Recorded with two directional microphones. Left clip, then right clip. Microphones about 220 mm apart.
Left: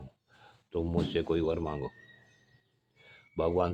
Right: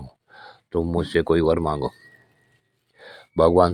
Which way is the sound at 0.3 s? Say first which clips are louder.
Right 11 dB; 35° right (ahead or behind).